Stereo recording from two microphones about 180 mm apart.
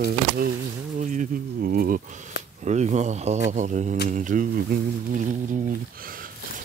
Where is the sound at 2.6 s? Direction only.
40° right (ahead or behind).